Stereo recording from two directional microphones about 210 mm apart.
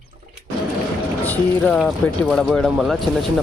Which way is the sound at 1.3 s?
5° left (ahead or behind).